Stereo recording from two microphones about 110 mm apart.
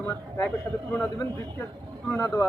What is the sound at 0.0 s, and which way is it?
Speech, 10° left (ahead or behind).